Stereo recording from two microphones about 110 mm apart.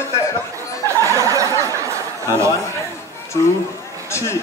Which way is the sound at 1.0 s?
30° right (ahead or behind).